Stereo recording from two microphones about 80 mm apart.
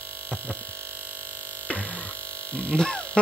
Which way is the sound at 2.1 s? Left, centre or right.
Right.